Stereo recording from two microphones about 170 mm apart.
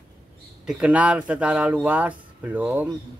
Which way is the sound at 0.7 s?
5° right (ahead or behind).